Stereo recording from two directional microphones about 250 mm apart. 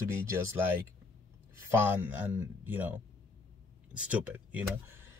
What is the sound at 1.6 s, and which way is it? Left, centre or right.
Speech, centre.